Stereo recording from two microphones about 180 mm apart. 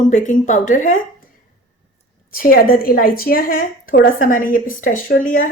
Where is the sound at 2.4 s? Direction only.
55° left (ahead or behind).